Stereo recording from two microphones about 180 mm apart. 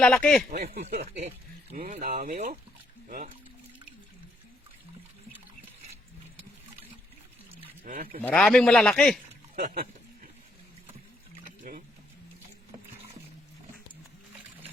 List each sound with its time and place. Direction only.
0.0 s a man's voice: 5° left (ahead or behind)
0.7 s speech: 55° right (ahead or behind)
7.9 s speech: 50° right (ahead or behind)
8.2 s a man's voice: 5° left (ahead or behind)
9.6 s speech: 50° right (ahead or behind)
11.6 s speech: 55° right (ahead or behind)